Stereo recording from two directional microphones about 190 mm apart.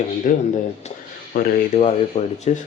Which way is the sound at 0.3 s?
45° left (ahead or behind).